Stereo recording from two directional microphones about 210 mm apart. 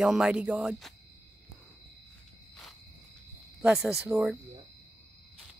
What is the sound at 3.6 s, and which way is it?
Speech, 5° right (ahead or behind).